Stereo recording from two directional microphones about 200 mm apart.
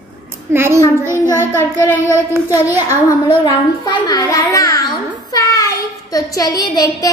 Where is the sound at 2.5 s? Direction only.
15° left (ahead or behind).